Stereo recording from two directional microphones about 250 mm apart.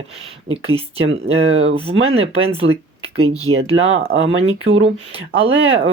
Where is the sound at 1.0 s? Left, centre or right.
Right.